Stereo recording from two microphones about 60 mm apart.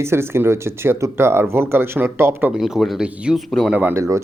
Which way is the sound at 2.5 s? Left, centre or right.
Centre.